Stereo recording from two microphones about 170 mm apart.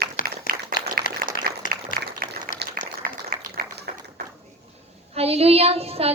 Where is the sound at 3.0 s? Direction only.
60° right (ahead or behind).